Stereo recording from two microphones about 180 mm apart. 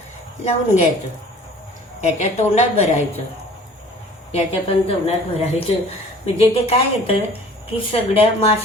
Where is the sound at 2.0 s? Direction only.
40° left (ahead or behind).